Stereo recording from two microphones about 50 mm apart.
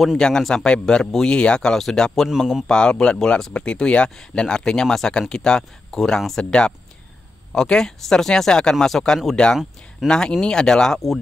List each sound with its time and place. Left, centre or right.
0.4 s speech: centre
0.7 s speech: centre
2.2 s speech: centre
2.7 s speech: centre